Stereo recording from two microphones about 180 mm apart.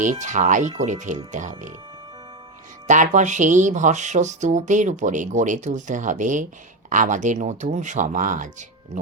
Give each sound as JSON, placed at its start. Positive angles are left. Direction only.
{"t": 0.0, "sound": "speech", "side_deg": -45}
{"t": 2.8, "sound": "speech", "side_deg": -45}